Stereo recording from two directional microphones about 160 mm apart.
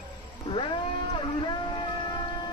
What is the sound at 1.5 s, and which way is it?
Music, 30° left (ahead or behind).